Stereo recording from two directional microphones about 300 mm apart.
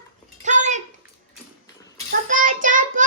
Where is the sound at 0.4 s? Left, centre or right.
Right.